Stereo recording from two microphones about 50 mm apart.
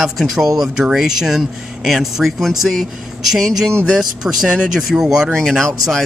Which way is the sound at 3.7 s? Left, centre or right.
Centre.